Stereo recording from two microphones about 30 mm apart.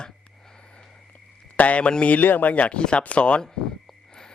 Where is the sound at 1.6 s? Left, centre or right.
Left.